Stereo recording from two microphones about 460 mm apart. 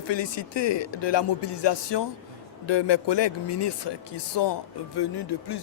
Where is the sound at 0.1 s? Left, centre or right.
Left.